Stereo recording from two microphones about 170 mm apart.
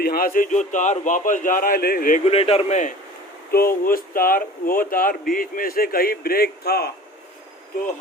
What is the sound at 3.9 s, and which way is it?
Speech, 55° left (ahead or behind).